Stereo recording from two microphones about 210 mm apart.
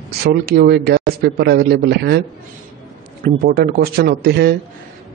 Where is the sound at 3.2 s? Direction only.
45° right (ahead or behind).